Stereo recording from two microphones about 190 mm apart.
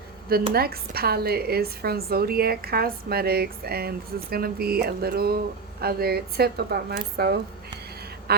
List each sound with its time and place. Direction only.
0.5 s a woman's voice: 55° right (ahead or behind)